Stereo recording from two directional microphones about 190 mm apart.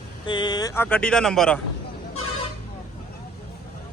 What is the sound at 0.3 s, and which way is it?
Speech, 25° left (ahead or behind).